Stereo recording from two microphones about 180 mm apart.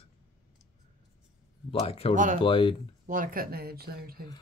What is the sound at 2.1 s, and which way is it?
Speech, 45° right (ahead or behind).